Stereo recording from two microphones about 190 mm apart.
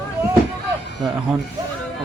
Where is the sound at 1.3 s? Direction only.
5° right (ahead or behind).